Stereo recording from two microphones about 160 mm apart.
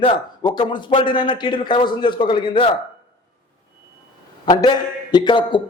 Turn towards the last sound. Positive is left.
turn(degrees=30)  # may be behind; listen again after turning